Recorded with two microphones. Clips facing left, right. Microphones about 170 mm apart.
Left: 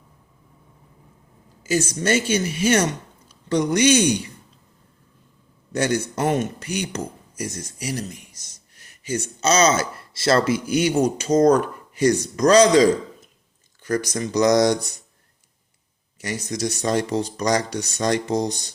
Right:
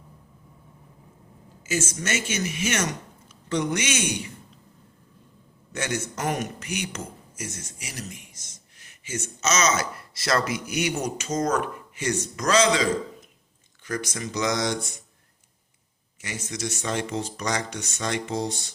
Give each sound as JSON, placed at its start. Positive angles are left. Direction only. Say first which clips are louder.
{"t": 1.6, "sound": "speech", "louder": "left 7 dB", "side_deg": 35}
{"t": 5.7, "sound": "speech", "louder": "left 7 dB", "side_deg": 35}
{"t": 16.2, "sound": "speech", "louder": "left 6 dB", "side_deg": 40}